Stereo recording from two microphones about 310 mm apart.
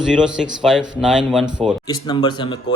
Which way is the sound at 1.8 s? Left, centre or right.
Centre.